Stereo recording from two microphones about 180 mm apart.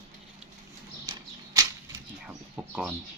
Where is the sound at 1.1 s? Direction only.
20° right (ahead or behind).